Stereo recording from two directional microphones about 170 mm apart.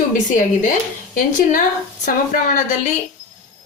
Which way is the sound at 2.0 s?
50° left (ahead or behind).